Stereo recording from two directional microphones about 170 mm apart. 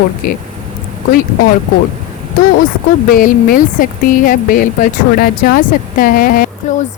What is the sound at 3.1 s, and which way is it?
Speech, 55° left (ahead or behind).